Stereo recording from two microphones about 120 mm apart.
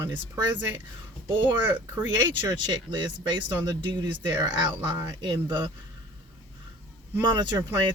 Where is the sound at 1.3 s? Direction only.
40° right (ahead or behind).